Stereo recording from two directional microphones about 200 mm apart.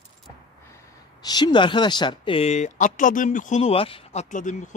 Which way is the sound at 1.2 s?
20° left (ahead or behind).